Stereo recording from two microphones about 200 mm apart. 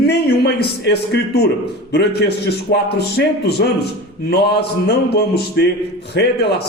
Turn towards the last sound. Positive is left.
turn(degrees=55)  # may be behind; listen again after turning